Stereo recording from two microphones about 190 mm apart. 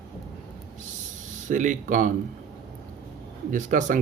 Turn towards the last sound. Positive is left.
turn(degrees=-45)  # may be behind; listen again after turning